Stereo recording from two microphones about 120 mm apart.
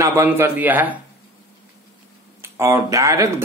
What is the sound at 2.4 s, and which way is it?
Speech, 20° right (ahead or behind).